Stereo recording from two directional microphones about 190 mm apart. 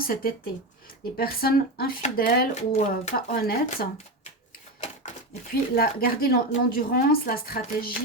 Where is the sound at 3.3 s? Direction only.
55° left (ahead or behind).